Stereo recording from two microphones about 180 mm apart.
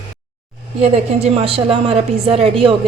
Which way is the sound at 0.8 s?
35° right (ahead or behind).